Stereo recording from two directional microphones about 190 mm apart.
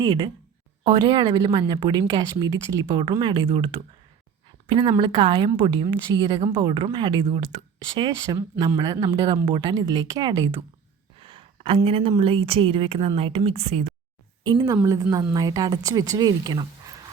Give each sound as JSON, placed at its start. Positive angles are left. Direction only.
{"t": 0.0, "sound": "speech", "side_deg": -25}
{"t": 14.4, "sound": "speech", "side_deg": -20}